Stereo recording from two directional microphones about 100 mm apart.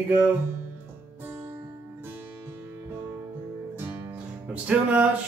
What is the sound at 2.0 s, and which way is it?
Music, 20° right (ahead or behind).